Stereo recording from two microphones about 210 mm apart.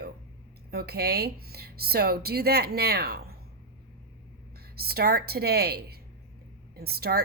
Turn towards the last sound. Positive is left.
turn(degrees=-50)  # may be behind; listen again after turning